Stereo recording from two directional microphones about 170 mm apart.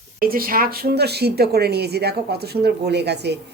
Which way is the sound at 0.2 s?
60° right (ahead or behind).